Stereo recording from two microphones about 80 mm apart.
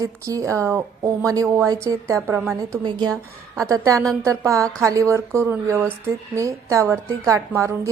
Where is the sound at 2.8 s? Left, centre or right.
Right.